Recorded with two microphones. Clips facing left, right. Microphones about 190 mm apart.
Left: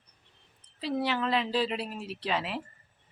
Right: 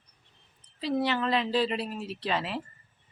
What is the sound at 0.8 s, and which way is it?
Speech, 10° left (ahead or behind).